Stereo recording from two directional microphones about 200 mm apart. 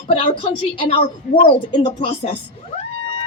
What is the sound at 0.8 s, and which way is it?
A woman's voice, 25° left (ahead or behind).